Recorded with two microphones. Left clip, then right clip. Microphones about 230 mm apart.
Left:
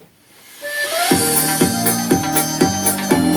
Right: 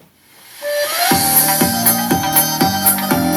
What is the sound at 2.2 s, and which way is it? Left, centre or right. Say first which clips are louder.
Music: right 2 dB; right.